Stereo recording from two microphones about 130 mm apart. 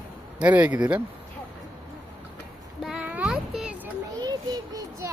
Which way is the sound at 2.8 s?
5° right (ahead or behind).